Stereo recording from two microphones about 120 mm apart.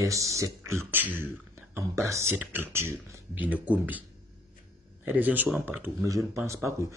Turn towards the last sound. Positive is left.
turn(degrees=-25)  # may be behind; listen again after turning